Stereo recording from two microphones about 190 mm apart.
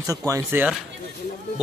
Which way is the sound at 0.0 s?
15° right (ahead or behind).